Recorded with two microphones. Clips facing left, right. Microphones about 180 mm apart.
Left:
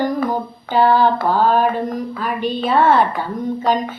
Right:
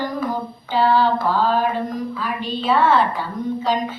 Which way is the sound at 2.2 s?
50° left (ahead or behind).